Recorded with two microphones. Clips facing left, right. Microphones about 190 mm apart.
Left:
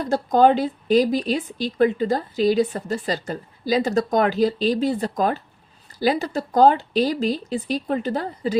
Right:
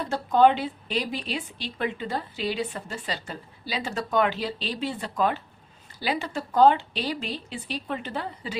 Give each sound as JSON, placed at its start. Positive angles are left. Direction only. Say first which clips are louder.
{"t": 0.0, "sound": "speech", "louder": "left 3 dB", "side_deg": 40}